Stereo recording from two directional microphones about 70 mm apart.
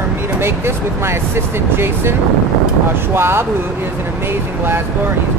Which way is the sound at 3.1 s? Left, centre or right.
Right.